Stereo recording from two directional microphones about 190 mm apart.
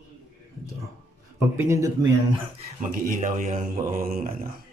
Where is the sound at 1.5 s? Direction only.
15° right (ahead or behind).